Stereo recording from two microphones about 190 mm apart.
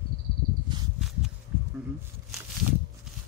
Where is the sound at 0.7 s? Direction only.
25° right (ahead or behind).